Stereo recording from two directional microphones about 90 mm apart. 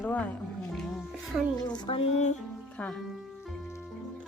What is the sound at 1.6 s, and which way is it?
Speech, 50° left (ahead or behind).